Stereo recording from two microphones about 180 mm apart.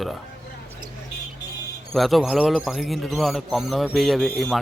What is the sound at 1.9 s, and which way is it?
Speech, centre (ahead or behind).